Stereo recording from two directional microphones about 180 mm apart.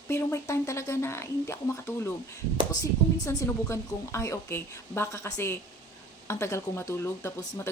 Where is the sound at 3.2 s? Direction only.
15° left (ahead or behind).